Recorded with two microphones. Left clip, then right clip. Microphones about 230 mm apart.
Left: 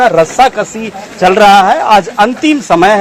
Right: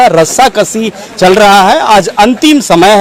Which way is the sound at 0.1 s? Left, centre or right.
Right.